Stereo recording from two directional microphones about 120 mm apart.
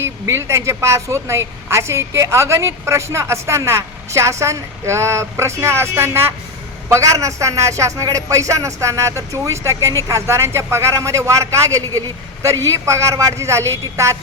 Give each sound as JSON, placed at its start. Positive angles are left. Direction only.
{"t": 0.0, "sound": "a woman's voice", "side_deg": -20}